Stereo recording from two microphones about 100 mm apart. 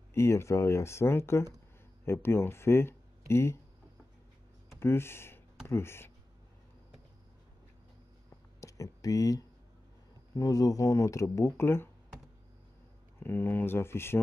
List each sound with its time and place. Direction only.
0.1 s speech: 25° left (ahead or behind)
4.7 s speech: 25° left (ahead or behind)
8.5 s a sound: 35° left (ahead or behind)
10.3 s speech: 35° left (ahead or behind)
13.2 s speech: 20° left (ahead or behind)